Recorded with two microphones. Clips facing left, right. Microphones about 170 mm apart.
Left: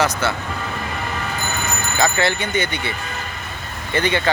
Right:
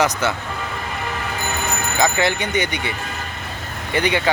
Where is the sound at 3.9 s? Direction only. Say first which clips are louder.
Even; 15° right (ahead or behind).